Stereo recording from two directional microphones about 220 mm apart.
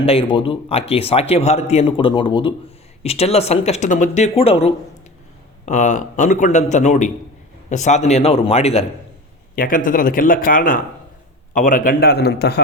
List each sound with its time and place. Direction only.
0.0 s a man's voice: 25° left (ahead or behind)
9.6 s a man's voice: 40° left (ahead or behind)